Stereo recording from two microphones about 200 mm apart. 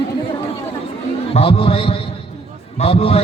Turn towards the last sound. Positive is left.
turn(degrees=30)  # may be behind; listen again after turning